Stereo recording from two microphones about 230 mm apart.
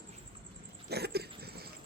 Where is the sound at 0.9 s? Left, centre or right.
Right.